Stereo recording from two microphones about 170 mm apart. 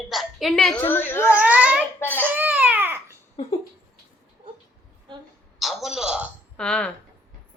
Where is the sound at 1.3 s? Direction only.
10° right (ahead or behind).